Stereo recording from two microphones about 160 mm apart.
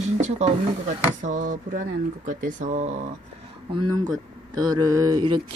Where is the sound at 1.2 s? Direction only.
50° right (ahead or behind).